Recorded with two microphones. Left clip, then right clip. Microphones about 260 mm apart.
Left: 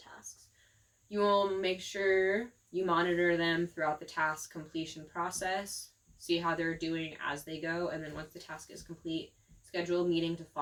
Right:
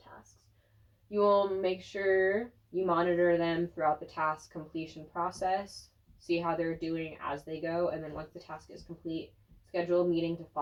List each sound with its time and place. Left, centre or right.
1.1 s speech: left
9.7 s speech: left